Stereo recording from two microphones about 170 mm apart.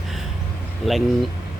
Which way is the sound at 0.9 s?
Centre (ahead or behind).